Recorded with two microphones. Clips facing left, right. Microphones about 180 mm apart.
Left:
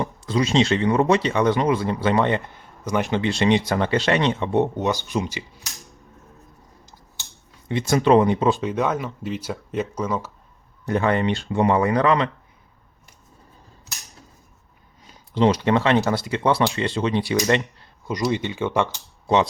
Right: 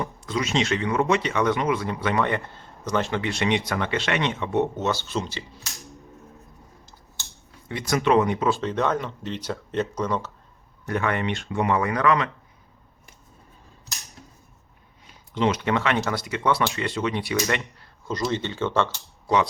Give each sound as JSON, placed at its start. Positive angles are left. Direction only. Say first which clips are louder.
{"t": 0.0, "sound": "speech", "louder": "left 5 dB", "side_deg": 30}
{"t": 4.8, "sound": "speech", "louder": "left 3 dB", "side_deg": 15}
{"t": 7.7, "sound": "speech", "louder": "left 4 dB", "side_deg": 25}
{"t": 8.5, "sound": "speech", "louder": "left 1 dB", "side_deg": 10}
{"t": 10.8, "sound": "speech", "louder": "left 5 dB", "side_deg": 30}
{"t": 15.4, "sound": "speech", "louder": "left 5 dB", "side_deg": 35}
{"t": 18.1, "sound": "speech", "louder": "left 3 dB", "side_deg": 15}